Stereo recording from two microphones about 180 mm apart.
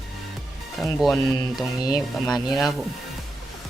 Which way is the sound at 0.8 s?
Centre (ahead or behind).